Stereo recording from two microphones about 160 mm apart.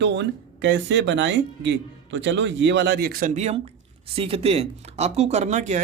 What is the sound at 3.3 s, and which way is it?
Speech, 45° right (ahead or behind).